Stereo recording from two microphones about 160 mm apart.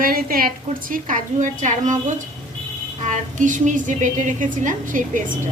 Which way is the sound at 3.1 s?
50° right (ahead or behind).